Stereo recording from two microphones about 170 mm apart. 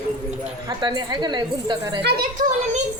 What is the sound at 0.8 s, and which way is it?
Speech, 25° right (ahead or behind).